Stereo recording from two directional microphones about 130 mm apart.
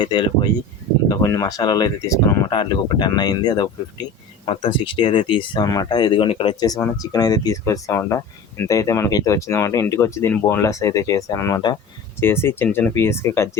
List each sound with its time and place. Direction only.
0.0 s speech: 35° left (ahead or behind)
4.4 s speech: 45° left (ahead or behind)
12.2 s speech: 20° left (ahead or behind)